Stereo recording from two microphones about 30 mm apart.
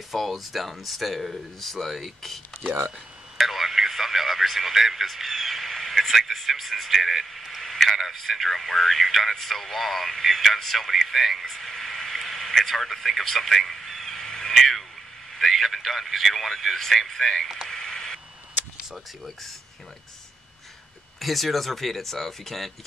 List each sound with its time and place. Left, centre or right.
0.1 s speech: centre
5.0 s a sound: centre
6.3 s speech: centre
7.6 s radio: centre
8.0 s speech: centre
11.5 s a sound: centre
13.2 s speech: centre
14.0 s a sound: centre
14.5 s speech: centre
17.6 s radio: centre
21.2 s speech: centre